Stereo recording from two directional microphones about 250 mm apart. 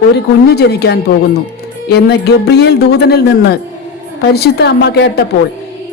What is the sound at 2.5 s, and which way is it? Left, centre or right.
Speech, left.